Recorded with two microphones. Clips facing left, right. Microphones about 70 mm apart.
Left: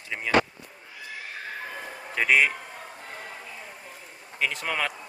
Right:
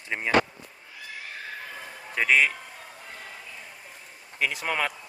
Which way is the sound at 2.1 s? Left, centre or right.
Centre.